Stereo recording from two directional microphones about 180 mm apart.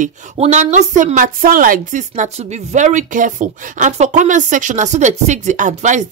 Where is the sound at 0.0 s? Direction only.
40° right (ahead or behind).